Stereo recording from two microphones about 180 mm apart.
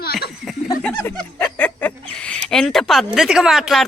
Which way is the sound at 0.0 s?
60° left (ahead or behind).